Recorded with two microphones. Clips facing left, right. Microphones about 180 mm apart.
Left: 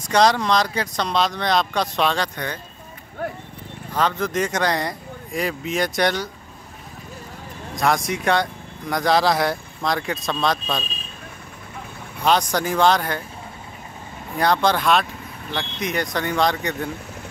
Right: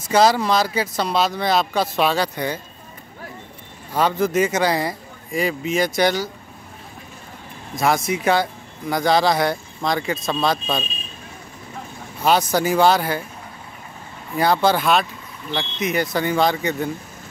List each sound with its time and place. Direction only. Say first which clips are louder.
0.0 s speech: right 1 dB; 5° right (ahead or behind)
3.2 s a sound: left 10 dB; 60° left (ahead or behind)
3.9 s speech: right 3 dB; 10° right (ahead or behind)
7.7 s speech: right 1 dB; centre (ahead or behind)
12.2 s speech: right 2 dB; 5° right (ahead or behind)
14.4 s speech: right 1 dB; 5° right (ahead or behind)